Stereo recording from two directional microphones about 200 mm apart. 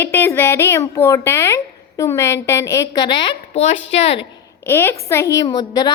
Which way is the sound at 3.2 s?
30° left (ahead or behind).